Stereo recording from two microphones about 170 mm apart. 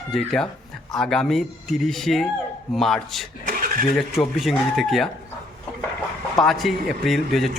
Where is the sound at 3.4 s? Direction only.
55° right (ahead or behind).